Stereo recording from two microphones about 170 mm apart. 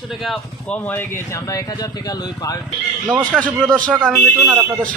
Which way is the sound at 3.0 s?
10° right (ahead or behind).